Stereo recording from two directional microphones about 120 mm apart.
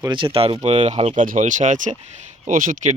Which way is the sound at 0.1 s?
50° right (ahead or behind).